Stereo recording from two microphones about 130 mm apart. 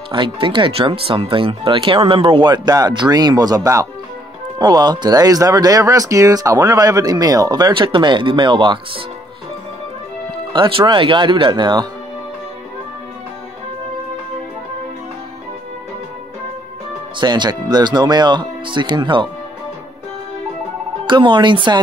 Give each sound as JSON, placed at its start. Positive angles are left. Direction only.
{"t": 0.1, "sound": "speech", "side_deg": -40}
{"t": 10.5, "sound": "speech", "side_deg": -40}
{"t": 17.2, "sound": "speech", "side_deg": -35}
{"t": 21.1, "sound": "speech", "side_deg": -35}